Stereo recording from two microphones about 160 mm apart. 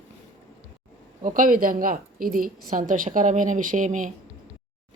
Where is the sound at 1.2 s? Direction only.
55° right (ahead or behind).